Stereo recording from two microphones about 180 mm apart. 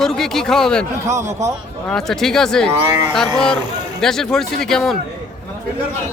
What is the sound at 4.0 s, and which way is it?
Speech, centre (ahead or behind).